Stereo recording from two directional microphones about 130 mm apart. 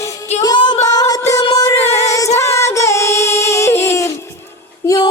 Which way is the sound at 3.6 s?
20° left (ahead or behind).